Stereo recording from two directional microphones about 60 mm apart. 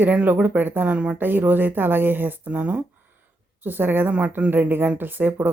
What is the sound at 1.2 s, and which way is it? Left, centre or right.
A woman's voice, right.